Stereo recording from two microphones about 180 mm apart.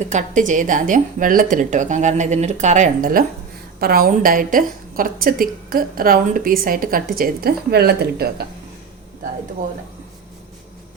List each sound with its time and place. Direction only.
0.1 s a woman's voice: 45° right (ahead or behind); by 8.4 s 60° right (ahead or behind)